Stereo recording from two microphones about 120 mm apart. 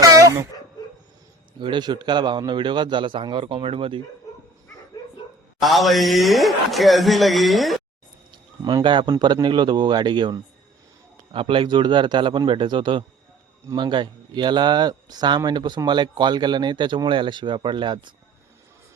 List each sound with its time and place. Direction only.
0.0 s a sound: 30° right (ahead or behind)
0.8 s dog: 35° left (ahead or behind)
1.5 s speech: 40° right (ahead or behind)
5.5 s a man's voice: centre (ahead or behind)
8.6 s speech: 40° right (ahead or behind)